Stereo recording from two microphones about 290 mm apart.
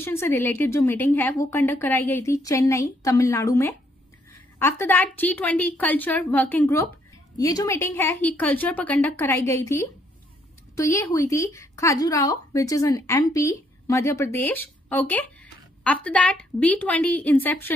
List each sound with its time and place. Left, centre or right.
0.0 s a woman's voice: centre